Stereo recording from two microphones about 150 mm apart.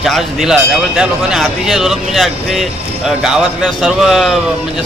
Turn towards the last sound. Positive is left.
turn(degrees=0)  # may be behind; listen again after turning